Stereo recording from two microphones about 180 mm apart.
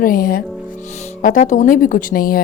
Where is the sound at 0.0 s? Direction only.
50° left (ahead or behind).